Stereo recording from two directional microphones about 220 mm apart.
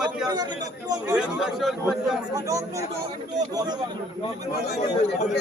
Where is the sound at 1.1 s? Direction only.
5° right (ahead or behind).